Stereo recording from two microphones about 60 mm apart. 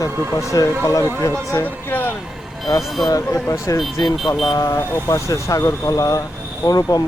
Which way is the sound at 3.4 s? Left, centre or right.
Left.